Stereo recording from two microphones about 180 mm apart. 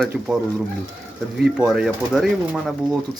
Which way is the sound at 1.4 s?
5° right (ahead or behind).